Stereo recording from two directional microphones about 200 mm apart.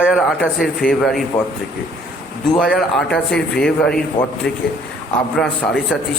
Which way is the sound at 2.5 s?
Centre (ahead or behind).